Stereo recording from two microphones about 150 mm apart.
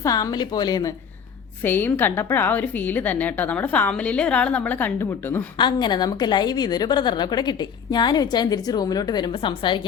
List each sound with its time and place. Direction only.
0.0 s a woman's voice: 25° left (ahead or behind)
1.6 s a woman's voice: 15° left (ahead or behind)
5.5 s a woman's voice: 30° left (ahead or behind)